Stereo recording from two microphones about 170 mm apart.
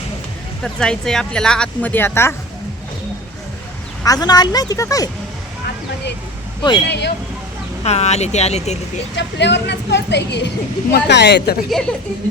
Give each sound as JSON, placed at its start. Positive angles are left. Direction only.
{"t": 0.6, "sound": "speech", "side_deg": 5}
{"t": 4.0, "sound": "speech", "side_deg": 20}
{"t": 6.6, "sound": "speech", "side_deg": 25}
{"t": 6.8, "sound": "speech", "side_deg": 85}
{"t": 7.9, "sound": "speech", "side_deg": 40}
{"t": 9.1, "sound": "a woman's voice", "side_deg": 90}
{"t": 11.7, "sound": "speech", "side_deg": 5}